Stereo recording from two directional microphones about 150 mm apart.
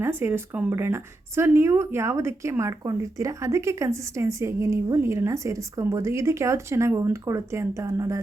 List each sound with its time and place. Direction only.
0.0 s speech: 15° right (ahead or behind)